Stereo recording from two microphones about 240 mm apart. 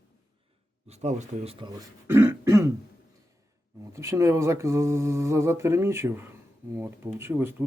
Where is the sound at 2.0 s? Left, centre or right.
Centre.